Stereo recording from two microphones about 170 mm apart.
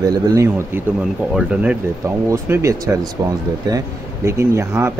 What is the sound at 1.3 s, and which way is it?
Speech, 5° right (ahead or behind).